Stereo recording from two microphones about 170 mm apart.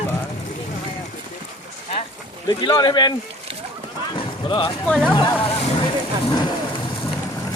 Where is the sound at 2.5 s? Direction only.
25° left (ahead or behind).